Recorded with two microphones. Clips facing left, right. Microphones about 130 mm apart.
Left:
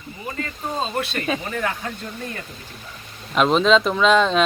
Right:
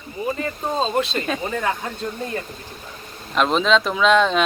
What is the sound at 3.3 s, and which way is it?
Speech, centre (ahead or behind).